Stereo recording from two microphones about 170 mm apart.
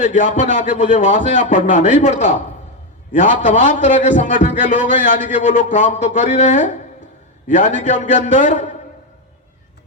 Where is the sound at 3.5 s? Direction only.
50° left (ahead or behind).